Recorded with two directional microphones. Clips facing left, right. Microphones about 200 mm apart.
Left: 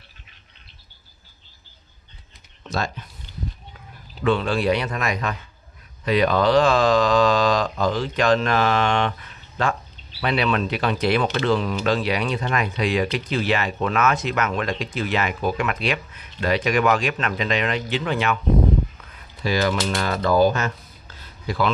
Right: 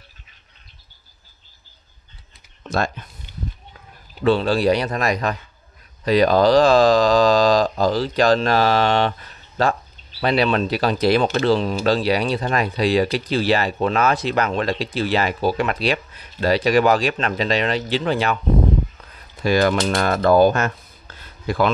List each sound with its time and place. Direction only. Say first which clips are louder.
4.2 s speech: right 4 dB; 35° right (ahead or behind)
19.1 s speech: right 5 dB; 50° right (ahead or behind)
21.2 s a sound: right 4 dB; 50° right (ahead or behind)